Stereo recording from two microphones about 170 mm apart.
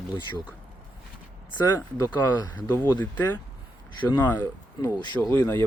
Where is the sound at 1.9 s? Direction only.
20° left (ahead or behind).